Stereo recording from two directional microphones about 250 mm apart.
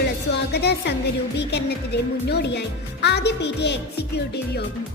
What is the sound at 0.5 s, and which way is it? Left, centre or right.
Speech, left.